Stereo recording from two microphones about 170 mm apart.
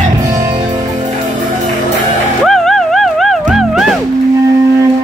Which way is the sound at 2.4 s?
Centre (ahead or behind).